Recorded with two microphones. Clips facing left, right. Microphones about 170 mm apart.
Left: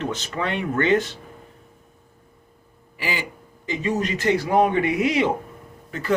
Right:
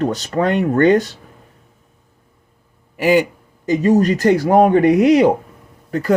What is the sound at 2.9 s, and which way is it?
Speech, 50° right (ahead or behind).